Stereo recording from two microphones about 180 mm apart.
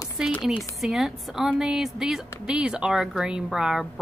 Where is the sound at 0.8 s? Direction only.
Centre (ahead or behind).